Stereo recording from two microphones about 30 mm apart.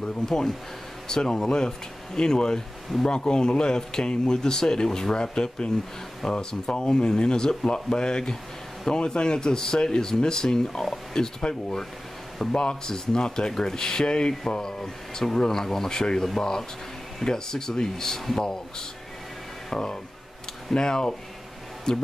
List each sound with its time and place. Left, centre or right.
0.0 s speech: centre
11.4 s speech: left